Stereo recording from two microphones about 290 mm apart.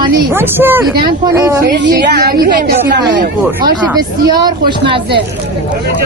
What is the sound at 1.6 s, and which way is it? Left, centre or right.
A woman's voice, right.